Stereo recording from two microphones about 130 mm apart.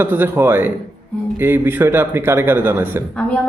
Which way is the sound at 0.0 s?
15° right (ahead or behind).